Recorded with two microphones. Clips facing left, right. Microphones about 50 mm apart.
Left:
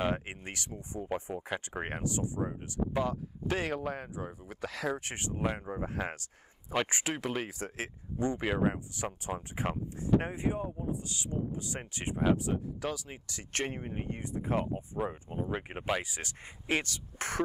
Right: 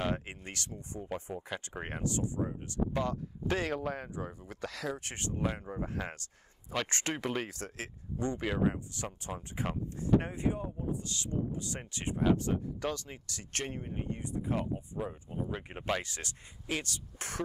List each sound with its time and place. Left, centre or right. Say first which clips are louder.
0.0 s speech: left 2 dB; centre
7.2 s speech: right 1 dB; centre
7.4 s speech: left 3 dB; centre
13.3 s speech: left 3 dB; left
16.3 s speech: left 4 dB; left